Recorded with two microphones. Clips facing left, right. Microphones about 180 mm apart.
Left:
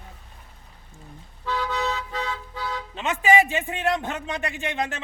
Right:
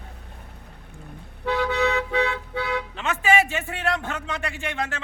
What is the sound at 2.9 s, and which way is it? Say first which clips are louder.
A man's voice: left 3 dB; 15° left (ahead or behind).